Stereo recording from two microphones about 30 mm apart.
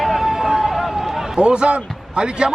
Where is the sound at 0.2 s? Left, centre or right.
Centre.